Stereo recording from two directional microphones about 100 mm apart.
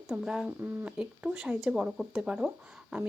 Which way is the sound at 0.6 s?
20° right (ahead or behind).